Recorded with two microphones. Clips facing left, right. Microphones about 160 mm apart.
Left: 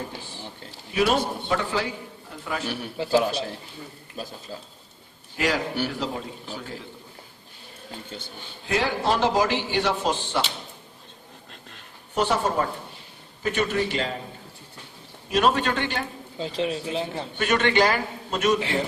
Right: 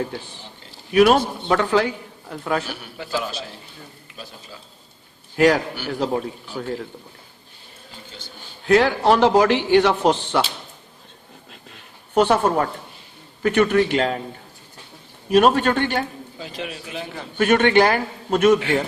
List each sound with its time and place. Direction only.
0.9 s a man's voice: 65° right (ahead or behind)
3.0 s a man's voice: 30° left (ahead or behind)
5.4 s a man's voice: 60° right (ahead or behind)
8.6 s a man's voice: 65° right (ahead or behind)
12.1 s a man's voice: 60° right (ahead or behind)
15.3 s a man's voice: 50° right (ahead or behind)
16.4 s a man's voice: 30° left (ahead or behind)
17.3 s a man's voice: 55° right (ahead or behind)